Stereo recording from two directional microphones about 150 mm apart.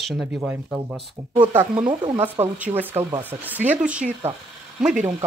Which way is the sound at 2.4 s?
10° right (ahead or behind).